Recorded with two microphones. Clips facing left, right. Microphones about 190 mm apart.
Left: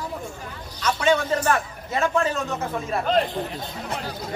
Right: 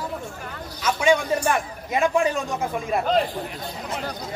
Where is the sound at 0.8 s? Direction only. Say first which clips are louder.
Right 1 dB; 10° right (ahead or behind).